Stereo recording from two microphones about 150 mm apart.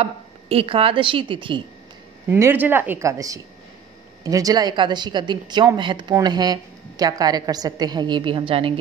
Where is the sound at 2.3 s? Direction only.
15° right (ahead or behind).